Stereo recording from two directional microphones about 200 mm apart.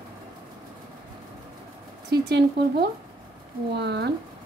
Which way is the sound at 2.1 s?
55° right (ahead or behind).